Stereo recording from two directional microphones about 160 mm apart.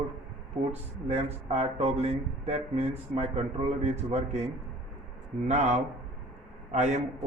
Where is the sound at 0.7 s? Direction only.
40° right (ahead or behind).